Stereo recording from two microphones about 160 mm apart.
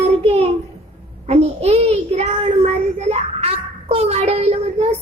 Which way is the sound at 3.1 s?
40° right (ahead or behind).